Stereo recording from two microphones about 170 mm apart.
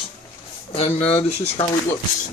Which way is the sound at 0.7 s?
35° left (ahead or behind).